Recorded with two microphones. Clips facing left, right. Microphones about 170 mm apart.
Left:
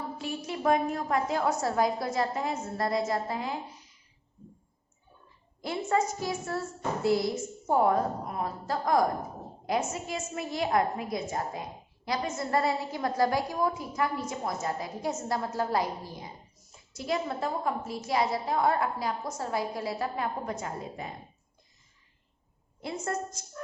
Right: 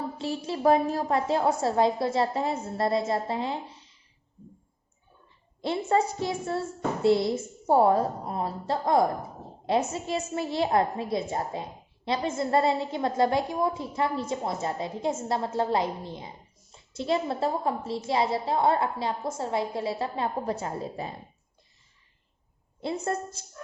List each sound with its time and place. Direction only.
0.2 s a woman's voice: 30° right (ahead or behind)
5.9 s a woman's voice: 30° right (ahead or behind)
22.8 s a woman's voice: 30° right (ahead or behind)